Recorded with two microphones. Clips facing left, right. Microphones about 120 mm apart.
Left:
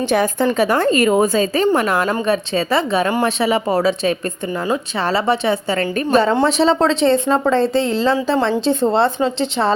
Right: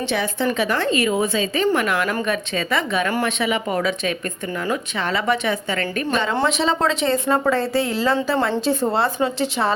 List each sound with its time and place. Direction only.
0.0 s a woman's voice: 45° left (ahead or behind); by 9.7 s 25° left (ahead or behind)